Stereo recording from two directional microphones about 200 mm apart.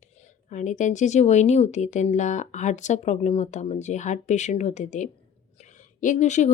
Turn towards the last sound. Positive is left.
turn(degrees=35)  # may be behind; listen again after turning